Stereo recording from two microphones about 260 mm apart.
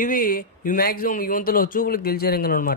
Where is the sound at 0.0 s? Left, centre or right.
Left.